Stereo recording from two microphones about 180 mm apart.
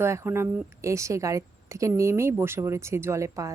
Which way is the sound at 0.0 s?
15° right (ahead or behind).